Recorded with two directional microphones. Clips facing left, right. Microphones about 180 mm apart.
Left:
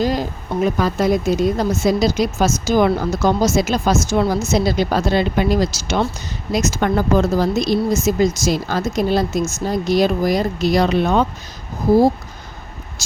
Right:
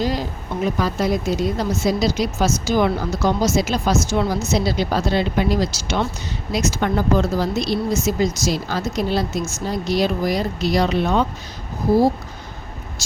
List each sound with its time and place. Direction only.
0.0 s a sound: 50° left (ahead or behind)
0.8 s speech: 50° left (ahead or behind)
13.0 s speech: 45° left (ahead or behind)